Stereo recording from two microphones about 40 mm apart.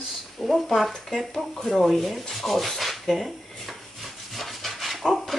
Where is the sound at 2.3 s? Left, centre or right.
Centre.